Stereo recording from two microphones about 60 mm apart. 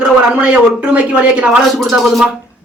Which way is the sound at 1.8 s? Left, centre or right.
Centre.